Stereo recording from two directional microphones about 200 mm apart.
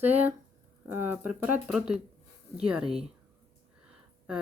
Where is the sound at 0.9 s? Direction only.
10° right (ahead or behind).